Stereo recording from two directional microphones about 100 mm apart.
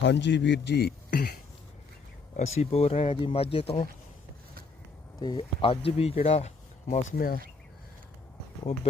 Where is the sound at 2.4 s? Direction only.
90° left; by 3.8 s 75° left (ahead or behind).